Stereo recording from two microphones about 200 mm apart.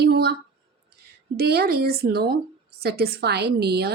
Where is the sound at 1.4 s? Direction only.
50° right (ahead or behind).